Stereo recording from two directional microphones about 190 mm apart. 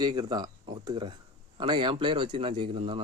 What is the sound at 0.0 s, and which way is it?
A man's voice, 20° right (ahead or behind).